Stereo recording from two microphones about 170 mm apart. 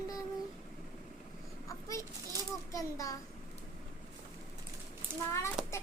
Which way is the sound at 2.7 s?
20° left (ahead or behind).